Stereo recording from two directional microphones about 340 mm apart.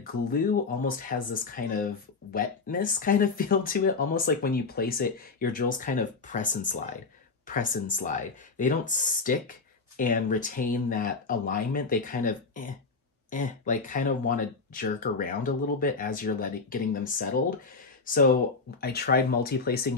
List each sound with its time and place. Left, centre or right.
0.0 s speech: left